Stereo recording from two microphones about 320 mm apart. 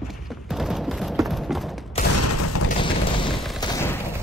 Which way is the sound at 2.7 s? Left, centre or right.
Centre.